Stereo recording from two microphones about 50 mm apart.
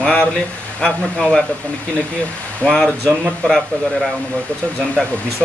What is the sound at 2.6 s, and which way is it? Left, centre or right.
Speech, centre.